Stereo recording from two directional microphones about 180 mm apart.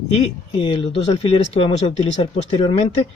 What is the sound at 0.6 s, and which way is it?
Speech, 30° left (ahead or behind).